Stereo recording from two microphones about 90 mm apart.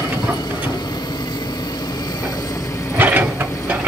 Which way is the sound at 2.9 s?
20° right (ahead or behind).